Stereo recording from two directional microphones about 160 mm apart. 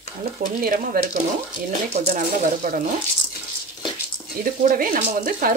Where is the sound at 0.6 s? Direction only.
65° right (ahead or behind).